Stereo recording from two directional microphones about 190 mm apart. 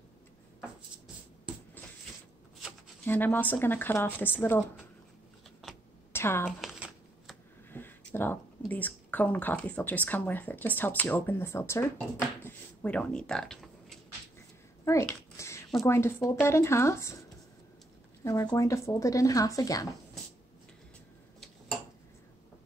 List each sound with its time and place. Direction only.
3.1 s speech: 10° left (ahead or behind)
6.1 s speech: 10° left (ahead or behind)
6.6 s shuffling cards: centre (ahead or behind)
7.7 s speech: 10° left (ahead or behind)
14.9 s a sound: 15° left (ahead or behind)
15.8 s speech: 15° left (ahead or behind)
18.2 s speech: 20° left (ahead or behind)